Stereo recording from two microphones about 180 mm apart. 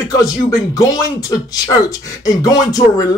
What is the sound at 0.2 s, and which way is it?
Speech, 20° left (ahead or behind).